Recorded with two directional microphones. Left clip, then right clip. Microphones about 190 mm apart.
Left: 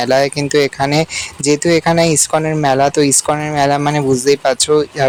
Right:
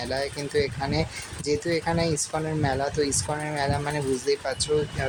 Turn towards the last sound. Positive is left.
turn(degrees=40)  # may be behind; listen again after turning